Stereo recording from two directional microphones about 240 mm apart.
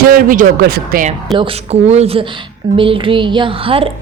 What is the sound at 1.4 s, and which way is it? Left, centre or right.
A woman's voice, right.